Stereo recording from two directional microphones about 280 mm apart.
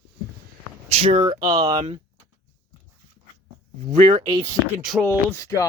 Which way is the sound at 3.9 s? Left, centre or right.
Centre.